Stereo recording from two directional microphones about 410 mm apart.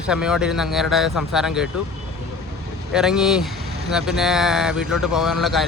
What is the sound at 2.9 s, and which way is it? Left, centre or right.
Speech, centre.